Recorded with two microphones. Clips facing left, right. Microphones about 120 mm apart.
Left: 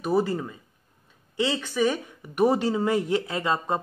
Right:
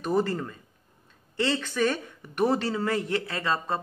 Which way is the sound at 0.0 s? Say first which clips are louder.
Left 2 dB; 10° left (ahead or behind).